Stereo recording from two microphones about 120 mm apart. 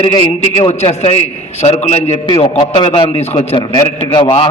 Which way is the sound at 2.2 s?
50° left (ahead or behind).